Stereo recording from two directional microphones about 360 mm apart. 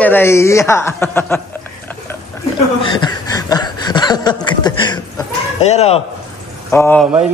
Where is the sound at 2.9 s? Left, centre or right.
Centre.